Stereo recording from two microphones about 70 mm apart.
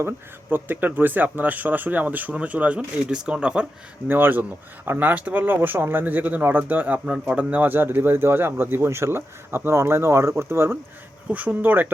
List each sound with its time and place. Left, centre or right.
0.5 s speech: right
4.1 s speech: right
11.3 s speech: right